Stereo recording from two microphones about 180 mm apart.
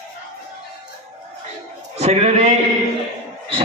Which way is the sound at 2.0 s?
35° right (ahead or behind).